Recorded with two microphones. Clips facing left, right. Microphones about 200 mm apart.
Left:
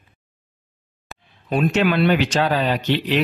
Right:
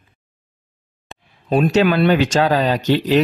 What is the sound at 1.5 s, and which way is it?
A man's voice, 40° right (ahead or behind).